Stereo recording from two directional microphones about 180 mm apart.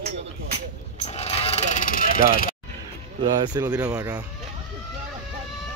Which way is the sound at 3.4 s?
20° right (ahead or behind).